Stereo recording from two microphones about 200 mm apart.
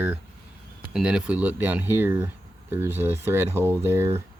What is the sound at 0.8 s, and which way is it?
Speech, 5° right (ahead or behind).